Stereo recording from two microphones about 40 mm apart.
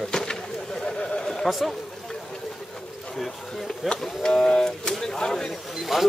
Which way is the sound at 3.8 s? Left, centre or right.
Centre.